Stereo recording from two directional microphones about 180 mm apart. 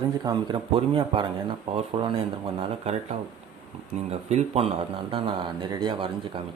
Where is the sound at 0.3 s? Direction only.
25° right (ahead or behind).